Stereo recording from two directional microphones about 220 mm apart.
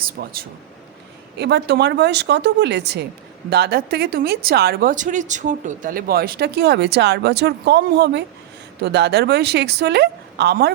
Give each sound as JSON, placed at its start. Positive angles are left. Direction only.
{"t": 0.2, "sound": "speech", "side_deg": -45}
{"t": 1.4, "sound": "speech", "side_deg": -50}